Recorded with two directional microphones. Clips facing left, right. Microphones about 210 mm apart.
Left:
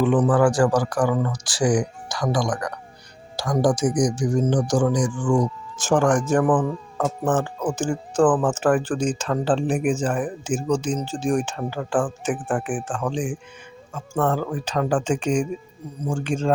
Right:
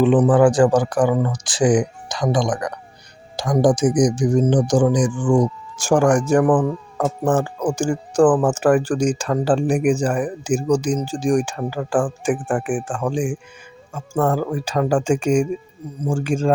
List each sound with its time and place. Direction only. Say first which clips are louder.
0.0 s speech: right 4 dB; 20° right (ahead or behind)